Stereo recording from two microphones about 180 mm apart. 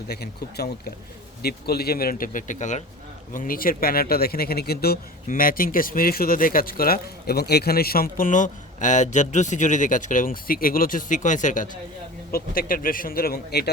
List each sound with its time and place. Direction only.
0.1 s a man's voice: 65° left (ahead or behind)